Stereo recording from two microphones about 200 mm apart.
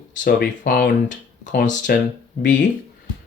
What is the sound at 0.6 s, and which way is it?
Speech, 45° left (ahead or behind).